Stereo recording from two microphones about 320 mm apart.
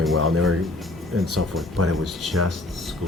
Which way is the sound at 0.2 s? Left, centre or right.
Right.